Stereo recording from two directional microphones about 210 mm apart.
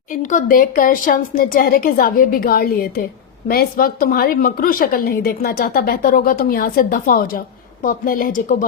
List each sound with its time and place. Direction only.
0.1 s a woman's voice: 40° left (ahead or behind)